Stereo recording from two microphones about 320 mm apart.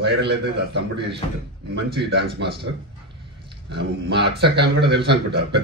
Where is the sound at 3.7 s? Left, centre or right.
Right.